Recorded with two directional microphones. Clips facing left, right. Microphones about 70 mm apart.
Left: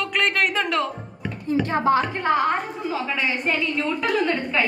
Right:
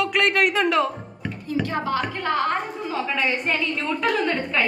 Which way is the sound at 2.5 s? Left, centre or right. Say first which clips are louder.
Left 1 dB; centre.